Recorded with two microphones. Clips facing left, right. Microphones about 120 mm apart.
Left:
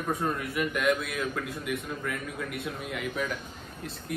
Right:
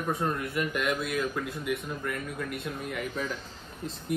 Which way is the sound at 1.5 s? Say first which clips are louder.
Right 1 dB; 55° left (ahead or behind).